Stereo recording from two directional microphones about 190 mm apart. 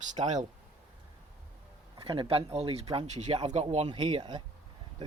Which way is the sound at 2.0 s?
30° right (ahead or behind).